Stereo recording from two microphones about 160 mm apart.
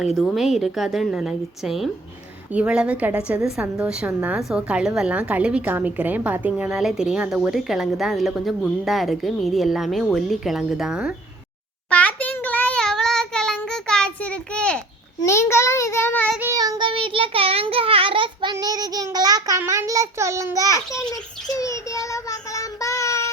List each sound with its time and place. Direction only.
0.0 s a woman's voice: centre (ahead or behind)
11.9 s child singing: 10° left (ahead or behind)
15.3 s a child's voice: 15° left (ahead or behind)
16.4 s child singing: 20° right (ahead or behind)
21.6 s child singing: 20° left (ahead or behind)